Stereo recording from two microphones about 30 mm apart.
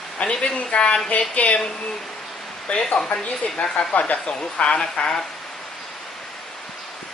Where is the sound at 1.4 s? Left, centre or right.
Left.